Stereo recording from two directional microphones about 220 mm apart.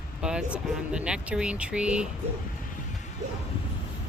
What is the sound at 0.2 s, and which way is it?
Speech, 5° right (ahead or behind).